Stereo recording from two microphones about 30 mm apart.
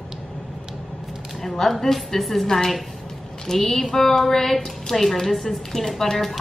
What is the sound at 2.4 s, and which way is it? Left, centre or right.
A woman's voice, centre.